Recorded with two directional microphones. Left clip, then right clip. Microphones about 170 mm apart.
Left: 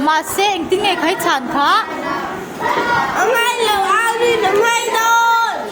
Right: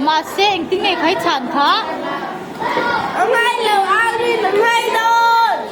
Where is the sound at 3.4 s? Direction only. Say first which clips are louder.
Even; 25° left (ahead or behind).